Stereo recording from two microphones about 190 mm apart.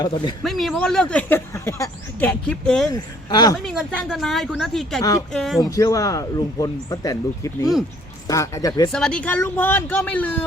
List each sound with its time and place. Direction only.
0.0 s speech: 20° left (ahead or behind)
0.4 s speech: centre (ahead or behind)
2.9 s speech: 20° left (ahead or behind)
3.7 s speech: centre (ahead or behind)
5.6 s speech: 20° left (ahead or behind)
8.9 s speech: 5° left (ahead or behind)